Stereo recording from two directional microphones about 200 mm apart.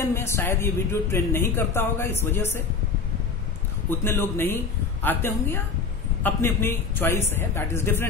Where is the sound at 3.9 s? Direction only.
10° left (ahead or behind).